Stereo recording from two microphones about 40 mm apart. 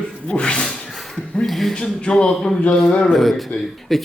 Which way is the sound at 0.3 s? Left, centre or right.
Left.